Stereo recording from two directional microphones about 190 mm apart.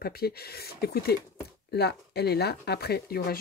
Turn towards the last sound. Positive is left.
turn(degrees=55)  # may be behind; listen again after turning